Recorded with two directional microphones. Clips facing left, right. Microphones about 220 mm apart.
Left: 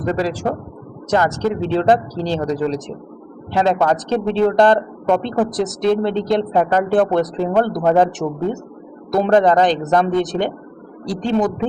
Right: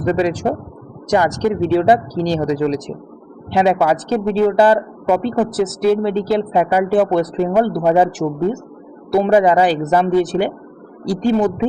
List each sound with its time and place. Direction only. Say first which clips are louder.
0.0 s speech: right 3 dB; 20° right (ahead or behind)
9.1 s speech: right 1 dB; 10° right (ahead or behind)